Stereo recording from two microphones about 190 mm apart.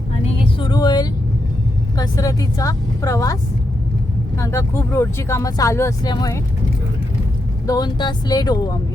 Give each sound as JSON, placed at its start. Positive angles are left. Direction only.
{"t": 0.6, "sound": "vehicle", "side_deg": 25}
{"t": 2.0, "sound": "speech", "side_deg": 20}
{"t": 4.4, "sound": "speech", "side_deg": 15}
{"t": 7.7, "sound": "speech", "side_deg": 20}